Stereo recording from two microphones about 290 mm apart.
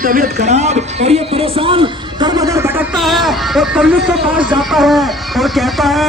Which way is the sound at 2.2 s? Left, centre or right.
Centre.